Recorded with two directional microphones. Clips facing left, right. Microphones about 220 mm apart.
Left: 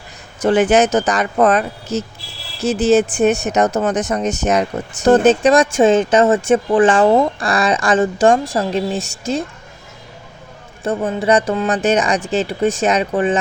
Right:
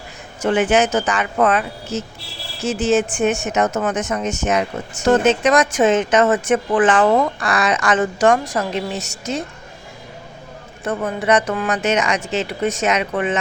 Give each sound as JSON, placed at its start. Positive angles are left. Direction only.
{"t": 0.4, "sound": "speech", "side_deg": 35}
{"t": 10.8, "sound": "speech", "side_deg": 30}